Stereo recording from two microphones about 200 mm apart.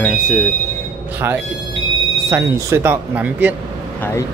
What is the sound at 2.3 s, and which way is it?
Speech, 15° right (ahead or behind).